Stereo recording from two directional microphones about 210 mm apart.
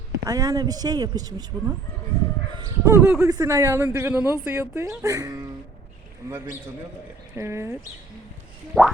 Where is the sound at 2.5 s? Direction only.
15° right (ahead or behind).